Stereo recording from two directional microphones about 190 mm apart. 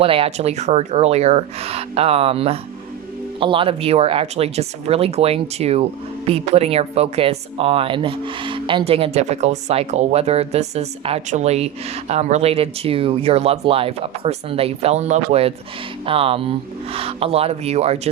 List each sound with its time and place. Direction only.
0.0 s speech: 30° right (ahead or behind)